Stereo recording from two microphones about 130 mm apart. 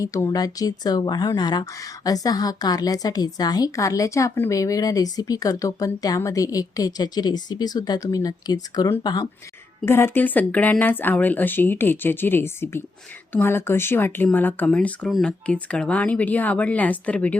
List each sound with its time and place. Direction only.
0.0 s speech: 25° left (ahead or behind)
9.8 s speech: 15° left (ahead or behind)